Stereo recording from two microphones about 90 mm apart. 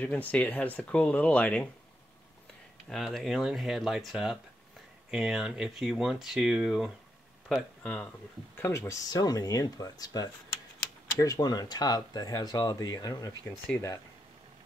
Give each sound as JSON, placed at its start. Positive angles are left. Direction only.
{"t": 0.0, "sound": "speech", "side_deg": 15}
{"t": 2.9, "sound": "speech", "side_deg": 5}
{"t": 7.5, "sound": "speech", "side_deg": 15}
{"t": 8.5, "sound": "speech", "side_deg": 25}
{"t": 9.1, "sound": "speech", "side_deg": 45}